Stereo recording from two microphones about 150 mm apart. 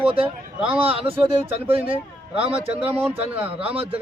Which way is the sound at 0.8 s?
40° right (ahead or behind).